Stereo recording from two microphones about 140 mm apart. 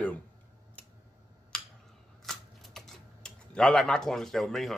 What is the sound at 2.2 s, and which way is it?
Typing, centre (ahead or behind).